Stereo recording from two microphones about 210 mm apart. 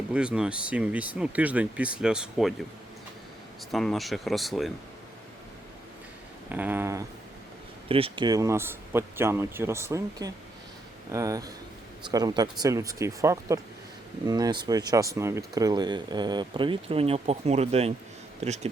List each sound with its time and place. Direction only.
0.1 s speech: 5° right (ahead or behind)
3.7 s speech: centre (ahead or behind)
6.5 s speech: 10° right (ahead or behind)
7.9 s speech: 25° right (ahead or behind)